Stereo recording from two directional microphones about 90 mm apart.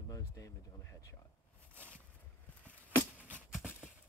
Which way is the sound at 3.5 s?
10° right (ahead or behind).